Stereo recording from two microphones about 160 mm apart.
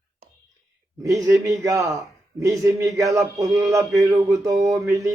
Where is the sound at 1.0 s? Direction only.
20° right (ahead or behind).